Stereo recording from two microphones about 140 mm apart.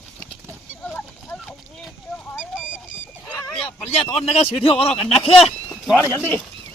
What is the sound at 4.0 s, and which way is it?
Speech, 50° left (ahead or behind).